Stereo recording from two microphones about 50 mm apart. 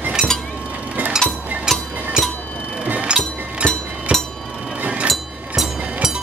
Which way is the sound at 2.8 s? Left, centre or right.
Right.